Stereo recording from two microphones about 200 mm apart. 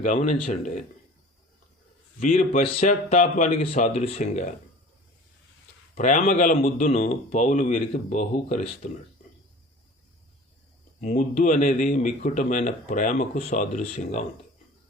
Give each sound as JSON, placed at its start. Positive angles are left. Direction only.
{"t": 0.0, "sound": "speech", "side_deg": 35}
{"t": 2.4, "sound": "speech", "side_deg": 40}
{"t": 2.6, "sound": "speech", "side_deg": 30}
{"t": 5.9, "sound": "speech", "side_deg": 40}
{"t": 11.0, "sound": "speech", "side_deg": 35}